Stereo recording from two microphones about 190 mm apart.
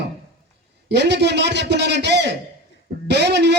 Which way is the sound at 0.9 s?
65° right (ahead or behind).